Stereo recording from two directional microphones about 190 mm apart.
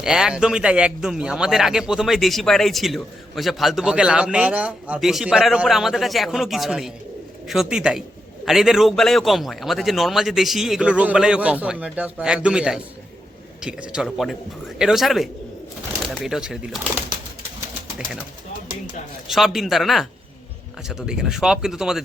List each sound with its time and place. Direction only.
0.0 s a man's voice: 5° right (ahead or behind)
19.3 s a man's voice: centre (ahead or behind)